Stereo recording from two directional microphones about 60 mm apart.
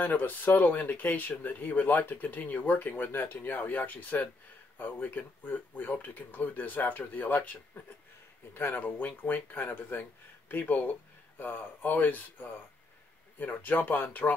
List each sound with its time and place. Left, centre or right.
0.0 s speech: left